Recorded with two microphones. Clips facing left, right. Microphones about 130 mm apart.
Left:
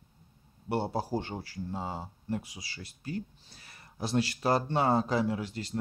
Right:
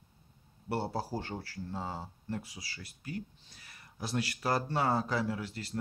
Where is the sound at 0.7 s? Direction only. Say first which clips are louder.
Left 3 dB; 20° left (ahead or behind).